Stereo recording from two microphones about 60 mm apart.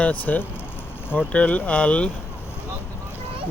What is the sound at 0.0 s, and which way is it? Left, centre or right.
Speech, left.